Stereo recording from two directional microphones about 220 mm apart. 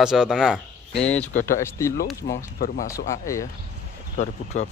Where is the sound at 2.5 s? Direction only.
40° left (ahead or behind).